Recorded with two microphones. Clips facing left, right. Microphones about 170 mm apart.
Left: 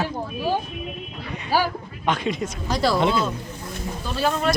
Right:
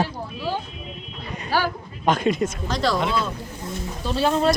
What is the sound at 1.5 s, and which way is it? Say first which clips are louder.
Speech: left 1 dB; 10° left (ahead or behind).